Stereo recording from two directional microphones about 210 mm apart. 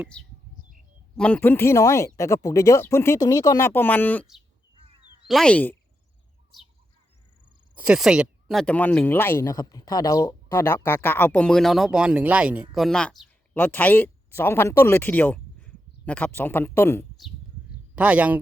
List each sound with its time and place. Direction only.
1.1 s speech: 5° left (ahead or behind)
4.8 s a sound: 25° right (ahead or behind)
5.3 s speech: 5° left (ahead or behind)
7.8 s speech: 5° right (ahead or behind)
17.9 s speech: 5° right (ahead or behind)